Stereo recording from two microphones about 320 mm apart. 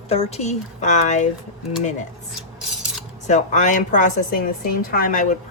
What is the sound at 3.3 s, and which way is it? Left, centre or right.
A woman's voice, left.